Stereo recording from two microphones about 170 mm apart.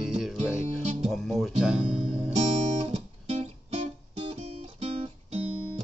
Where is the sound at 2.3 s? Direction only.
35° right (ahead or behind).